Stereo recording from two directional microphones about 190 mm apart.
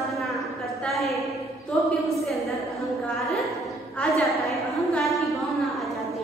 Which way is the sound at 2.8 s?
Centre (ahead or behind).